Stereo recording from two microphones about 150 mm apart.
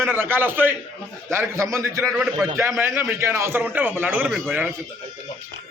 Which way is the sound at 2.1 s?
Centre (ahead or behind).